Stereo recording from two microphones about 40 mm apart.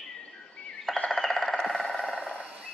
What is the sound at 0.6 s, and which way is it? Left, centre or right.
Chirp, left.